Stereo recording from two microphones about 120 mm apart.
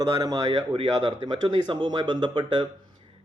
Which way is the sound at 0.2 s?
35° right (ahead or behind).